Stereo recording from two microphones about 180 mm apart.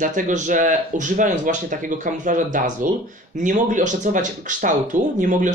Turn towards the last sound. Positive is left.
turn(degrees=-45)  # may be behind; listen again after turning